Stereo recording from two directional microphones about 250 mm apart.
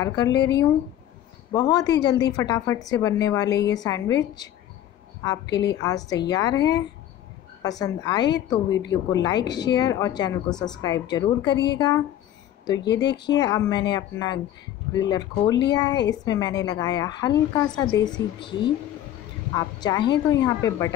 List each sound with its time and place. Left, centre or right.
0.0 s a woman's voice: centre
12.6 s a woman's voice: centre